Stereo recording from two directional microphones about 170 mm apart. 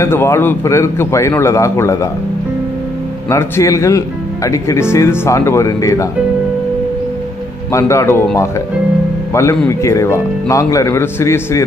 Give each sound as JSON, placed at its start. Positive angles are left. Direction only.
{"t": 0.0, "sound": "a man's voice", "side_deg": 15}
{"t": 3.3, "sound": "a man's voice", "side_deg": 15}
{"t": 7.7, "sound": "a man's voice", "side_deg": 15}
{"t": 9.3, "sound": "a man's voice", "side_deg": 15}